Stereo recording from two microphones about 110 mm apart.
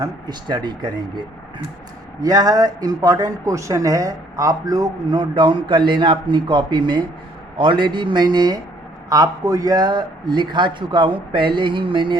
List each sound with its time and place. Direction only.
0.0 s speech: 40° right (ahead or behind)